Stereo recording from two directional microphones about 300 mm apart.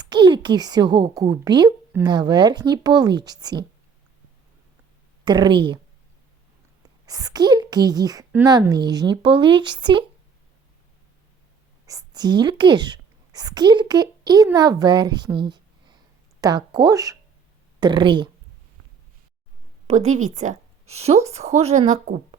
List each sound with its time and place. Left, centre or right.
0.0 s a woman's voice: centre
5.2 s a woman's voice: centre
7.0 s a woman's voice: centre
11.9 s a woman's voice: centre
19.9 s a woman's voice: right